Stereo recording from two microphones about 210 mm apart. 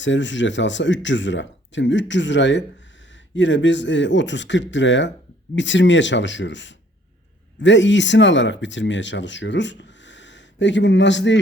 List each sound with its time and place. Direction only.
0.0 s speech: 60° left (ahead or behind)